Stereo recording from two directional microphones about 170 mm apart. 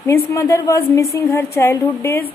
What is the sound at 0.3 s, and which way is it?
Speech, 20° left (ahead or behind).